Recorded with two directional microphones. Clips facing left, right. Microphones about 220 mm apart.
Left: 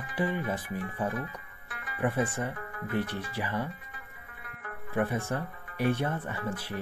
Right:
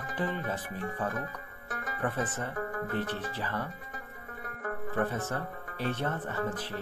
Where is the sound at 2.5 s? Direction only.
45° right (ahead or behind).